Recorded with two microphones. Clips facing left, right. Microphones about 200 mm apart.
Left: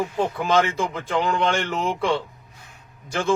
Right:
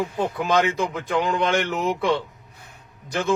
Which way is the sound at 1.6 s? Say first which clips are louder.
Right 1 dB; 20° right (ahead or behind).